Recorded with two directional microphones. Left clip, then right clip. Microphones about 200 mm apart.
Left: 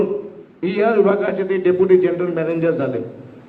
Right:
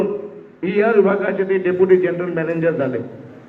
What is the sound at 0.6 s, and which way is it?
A man's voice, 65° left (ahead or behind).